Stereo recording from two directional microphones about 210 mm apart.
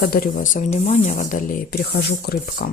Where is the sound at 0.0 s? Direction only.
40° left (ahead or behind).